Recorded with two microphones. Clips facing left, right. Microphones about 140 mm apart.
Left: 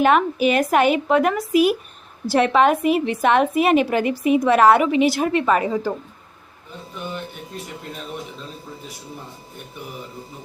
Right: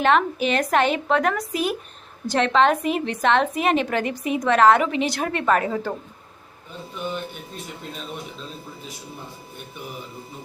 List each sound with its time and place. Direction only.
0.0 s a woman's voice: 10° left (ahead or behind)
4.2 s a woman's voice: 25° left (ahead or behind)
4.4 s a woman's voice: 10° left (ahead or behind)